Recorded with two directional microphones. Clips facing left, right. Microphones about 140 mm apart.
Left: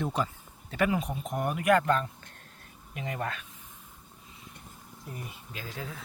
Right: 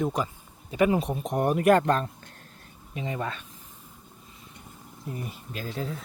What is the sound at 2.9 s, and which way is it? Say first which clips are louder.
Speech: right 3 dB; 25° right (ahead or behind).